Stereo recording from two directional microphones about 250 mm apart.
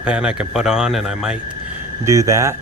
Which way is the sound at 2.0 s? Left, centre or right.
Centre.